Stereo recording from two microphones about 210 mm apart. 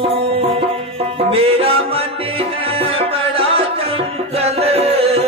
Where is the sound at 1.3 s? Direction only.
25° right (ahead or behind).